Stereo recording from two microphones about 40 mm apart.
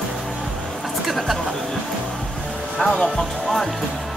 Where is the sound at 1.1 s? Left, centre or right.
Centre.